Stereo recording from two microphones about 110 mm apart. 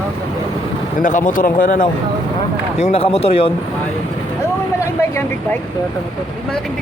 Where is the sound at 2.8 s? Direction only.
65° left (ahead or behind).